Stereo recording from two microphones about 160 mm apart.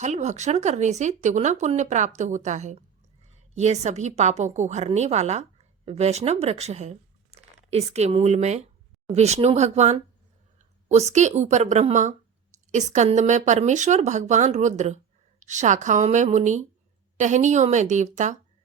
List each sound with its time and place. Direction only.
0.0 s a woman's voice: 45° right (ahead or behind)